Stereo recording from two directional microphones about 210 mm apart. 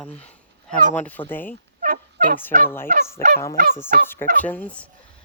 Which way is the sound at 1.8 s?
40° right (ahead or behind).